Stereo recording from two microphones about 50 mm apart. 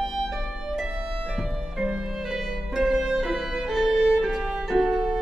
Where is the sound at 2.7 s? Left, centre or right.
Centre.